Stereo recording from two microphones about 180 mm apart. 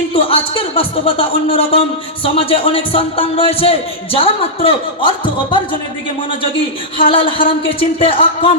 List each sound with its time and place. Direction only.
0.1 s a man's voice: 30° left (ahead or behind)
7.1 s speech: 30° left (ahead or behind)